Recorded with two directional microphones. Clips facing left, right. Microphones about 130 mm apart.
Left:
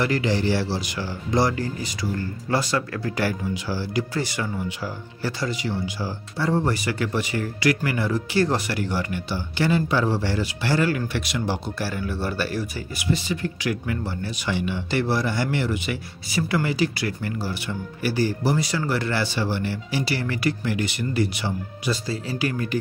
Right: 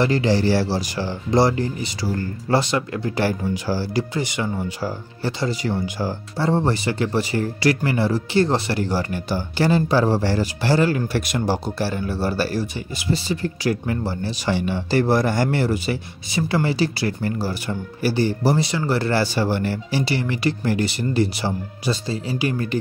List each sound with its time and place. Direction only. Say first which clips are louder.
0.0 s speech: right 4 dB; 30° right (ahead or behind)
3.5 s speech: right 3 dB; 40° right (ahead or behind)
4.1 s speech: right 2 dB; 20° right (ahead or behind)
4.6 s speech: right 4 dB; 30° right (ahead or behind)
5.6 s speech: right 4 dB; 50° right (ahead or behind)
6.3 s speech: right 2 dB; 30° right (ahead or behind)
11.1 s speech: right 4 dB; 40° right (ahead or behind)
16.3 s speech: right 2 dB; 25° right (ahead or behind); by 19.8 s 45° right (ahead or behind)
19.9 s speech: right 2 dB; 30° right (ahead or behind)
20.6 s speech: right 4 dB; 35° right (ahead or behind); by 22.6 s 20° right (ahead or behind)